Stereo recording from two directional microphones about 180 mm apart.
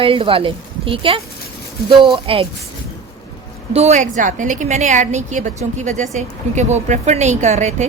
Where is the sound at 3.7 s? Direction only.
40° right (ahead or behind).